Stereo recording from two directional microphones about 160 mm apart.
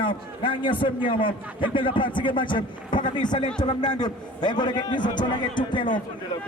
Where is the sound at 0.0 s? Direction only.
30° left (ahead or behind).